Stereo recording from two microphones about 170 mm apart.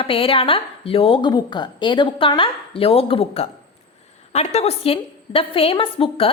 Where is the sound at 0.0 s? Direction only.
30° left (ahead or behind).